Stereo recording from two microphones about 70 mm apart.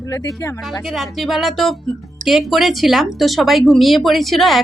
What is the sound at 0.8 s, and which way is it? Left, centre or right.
Speech, centre.